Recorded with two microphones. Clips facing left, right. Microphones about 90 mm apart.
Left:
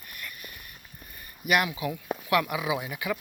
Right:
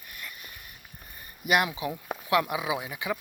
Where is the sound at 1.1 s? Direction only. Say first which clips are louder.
Even; 25° right (ahead or behind).